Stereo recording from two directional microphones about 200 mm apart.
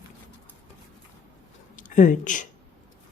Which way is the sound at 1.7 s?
40° left (ahead or behind).